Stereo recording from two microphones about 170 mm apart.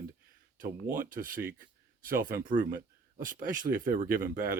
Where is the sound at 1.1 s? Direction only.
55° right (ahead or behind).